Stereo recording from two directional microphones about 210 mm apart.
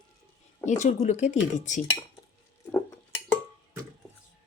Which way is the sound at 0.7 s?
35° left (ahead or behind).